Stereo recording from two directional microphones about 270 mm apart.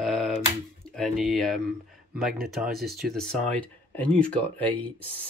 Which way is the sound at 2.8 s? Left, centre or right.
Right.